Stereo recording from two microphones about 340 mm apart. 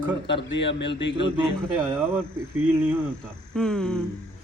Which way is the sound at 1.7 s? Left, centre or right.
Centre.